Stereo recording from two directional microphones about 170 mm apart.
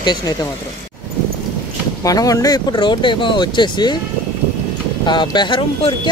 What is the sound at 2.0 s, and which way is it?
Speech, 20° left (ahead or behind).